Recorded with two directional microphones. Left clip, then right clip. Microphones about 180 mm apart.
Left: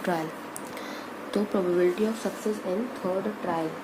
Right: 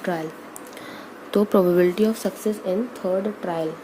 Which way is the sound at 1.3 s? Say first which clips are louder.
Right 8 dB; 35° right (ahead or behind).